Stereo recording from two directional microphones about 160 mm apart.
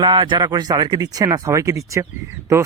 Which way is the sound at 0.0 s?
25° right (ahead or behind).